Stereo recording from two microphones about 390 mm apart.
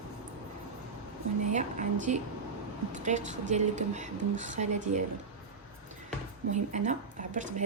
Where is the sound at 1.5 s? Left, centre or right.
Centre.